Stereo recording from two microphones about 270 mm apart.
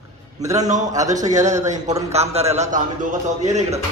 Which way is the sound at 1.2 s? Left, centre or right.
Right.